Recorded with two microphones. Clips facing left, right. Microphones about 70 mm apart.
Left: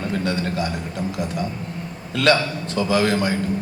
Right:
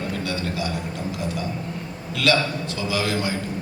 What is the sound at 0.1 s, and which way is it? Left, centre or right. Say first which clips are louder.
Speech: left 4 dB; left.